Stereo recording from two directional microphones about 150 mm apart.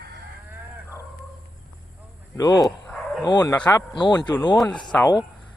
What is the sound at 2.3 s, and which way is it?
Speech, 25° left (ahead or behind).